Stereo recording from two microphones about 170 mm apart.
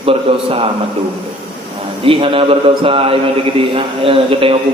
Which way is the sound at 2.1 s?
30° right (ahead or behind).